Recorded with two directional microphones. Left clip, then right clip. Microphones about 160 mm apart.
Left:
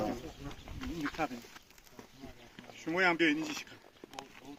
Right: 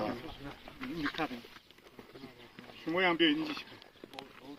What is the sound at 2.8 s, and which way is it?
Speech, 15° left (ahead or behind).